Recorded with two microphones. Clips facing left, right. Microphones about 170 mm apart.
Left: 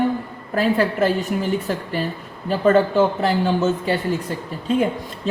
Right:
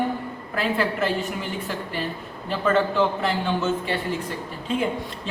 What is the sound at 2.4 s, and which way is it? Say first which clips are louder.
Speech: left 6 dB; 40° left (ahead or behind).